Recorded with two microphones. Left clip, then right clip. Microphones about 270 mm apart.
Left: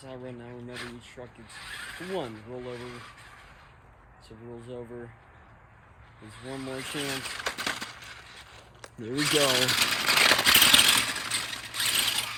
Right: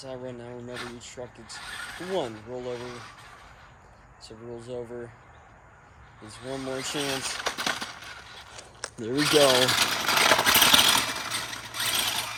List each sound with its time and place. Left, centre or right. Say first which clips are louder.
0.0 s speech: right 4 dB; centre
4.5 s speech: right 5 dB; centre
6.2 s a sound: right 4 dB; centre
9.1 s sewing machine: right 4 dB; centre